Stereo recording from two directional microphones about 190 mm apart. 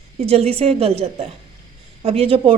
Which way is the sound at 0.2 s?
30° right (ahead or behind).